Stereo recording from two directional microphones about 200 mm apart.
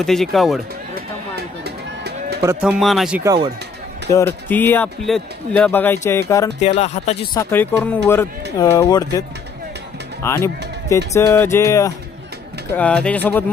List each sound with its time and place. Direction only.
0.0 s speech: centre (ahead or behind)
0.9 s music: 55° right (ahead or behind)
2.4 s speech: 10° right (ahead or behind)
3.2 s speech: 20° right (ahead or behind)
4.4 s speech: 10° left (ahead or behind)
6.6 s speech: 30° left (ahead or behind)
7.3 s speech: 10° left (ahead or behind)
10.2 s speech: 15° left (ahead or behind)